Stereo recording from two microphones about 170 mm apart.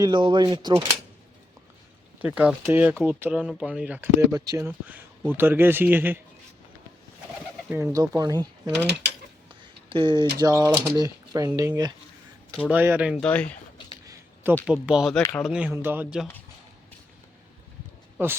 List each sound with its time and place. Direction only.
0.0 s speech: 25° right (ahead or behind)
2.2 s speech: 10° right (ahead or behind)
7.7 s speech: 10° right (ahead or behind)
8.1 s speech: 20° right (ahead or behind)
9.9 s speech: 25° right (ahead or behind); by 13.2 s 5° right (ahead or behind)
13.2 s speech: 10° left (ahead or behind)
14.7 s speech: 5° right (ahead or behind)
15.5 s speech: 10° right (ahead or behind)
18.2 s speech: 10° right (ahead or behind)